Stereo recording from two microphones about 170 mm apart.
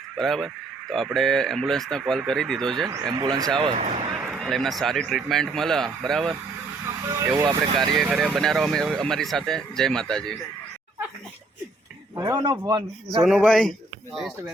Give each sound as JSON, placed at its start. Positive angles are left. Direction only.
{"t": 0.2, "sound": "speech", "side_deg": 0}
{"t": 2.9, "sound": "speech", "side_deg": -25}
{"t": 3.6, "sound": "speech", "side_deg": -40}
{"t": 4.1, "sound": "speech", "side_deg": 0}
{"t": 7.3, "sound": "speech", "side_deg": -25}
{"t": 8.0, "sound": "speech", "side_deg": -5}
{"t": 12.1, "sound": "speech", "side_deg": -20}
{"t": 13.2, "sound": "speech", "side_deg": 0}